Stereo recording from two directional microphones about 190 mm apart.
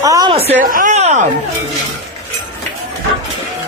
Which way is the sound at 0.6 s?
45° right (ahead or behind).